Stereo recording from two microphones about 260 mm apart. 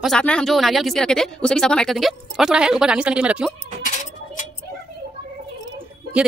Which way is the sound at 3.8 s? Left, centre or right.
Left.